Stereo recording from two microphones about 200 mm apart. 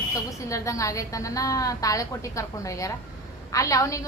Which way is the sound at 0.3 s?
15° left (ahead or behind).